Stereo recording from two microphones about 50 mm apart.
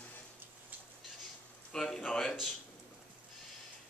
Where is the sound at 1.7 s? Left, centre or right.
Centre.